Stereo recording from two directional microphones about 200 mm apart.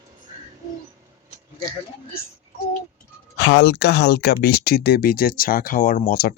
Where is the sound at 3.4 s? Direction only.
60° left (ahead or behind).